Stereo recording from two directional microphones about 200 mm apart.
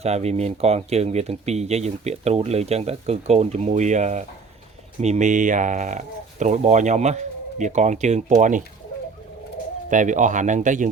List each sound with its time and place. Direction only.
0.0 s speech: 30° right (ahead or behind)
9.9 s speech: 40° right (ahead or behind)